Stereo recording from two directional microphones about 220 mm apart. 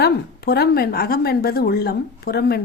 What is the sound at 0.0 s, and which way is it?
Speech, 45° left (ahead or behind).